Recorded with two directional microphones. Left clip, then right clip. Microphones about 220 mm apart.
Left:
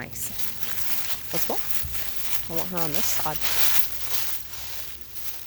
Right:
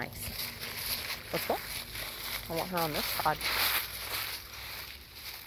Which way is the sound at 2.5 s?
10° left (ahead or behind).